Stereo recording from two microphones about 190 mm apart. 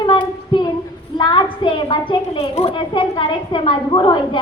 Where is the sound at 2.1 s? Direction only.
30° left (ahead or behind).